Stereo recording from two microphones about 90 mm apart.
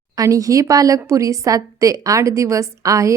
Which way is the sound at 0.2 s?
40° right (ahead or behind).